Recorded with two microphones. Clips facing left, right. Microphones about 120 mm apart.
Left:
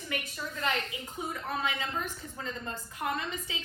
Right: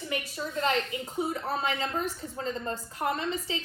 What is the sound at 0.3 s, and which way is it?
A woman's voice, 30° right (ahead or behind).